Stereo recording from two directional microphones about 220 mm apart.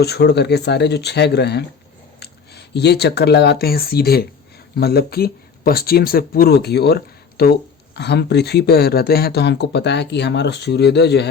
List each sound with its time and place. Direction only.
0.0 s speech: 50° left (ahead or behind)